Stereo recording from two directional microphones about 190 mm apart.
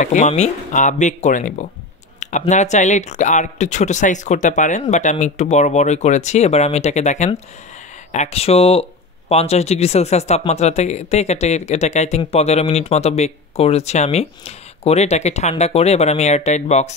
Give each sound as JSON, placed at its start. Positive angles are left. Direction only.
{"t": 0.0, "sound": "speech", "side_deg": 40}